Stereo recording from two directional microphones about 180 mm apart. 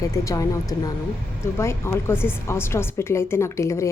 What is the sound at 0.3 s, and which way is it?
A woman's voice, 20° left (ahead or behind).